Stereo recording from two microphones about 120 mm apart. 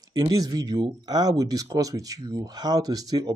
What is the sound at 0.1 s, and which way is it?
Speech, 30° right (ahead or behind).